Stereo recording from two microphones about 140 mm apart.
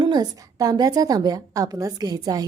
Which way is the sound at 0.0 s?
30° right (ahead or behind).